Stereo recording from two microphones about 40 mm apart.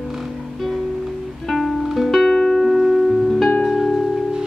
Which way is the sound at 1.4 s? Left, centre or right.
Centre.